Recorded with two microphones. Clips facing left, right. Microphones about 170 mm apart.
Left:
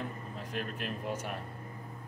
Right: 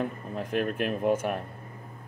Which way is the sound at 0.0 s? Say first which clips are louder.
Right 8 dB; 60° right (ahead or behind).